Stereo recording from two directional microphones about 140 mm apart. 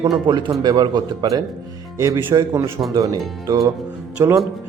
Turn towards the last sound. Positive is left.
turn(degrees=-15)  # may be behind; listen again after turning